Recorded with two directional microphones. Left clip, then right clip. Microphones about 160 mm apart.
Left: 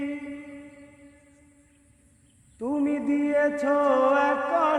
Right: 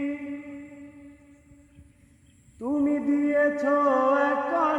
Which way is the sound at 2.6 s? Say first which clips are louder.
Right 1 dB; 15° left (ahead or behind).